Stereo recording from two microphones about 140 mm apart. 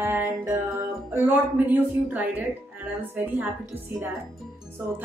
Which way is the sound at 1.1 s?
15° right (ahead or behind).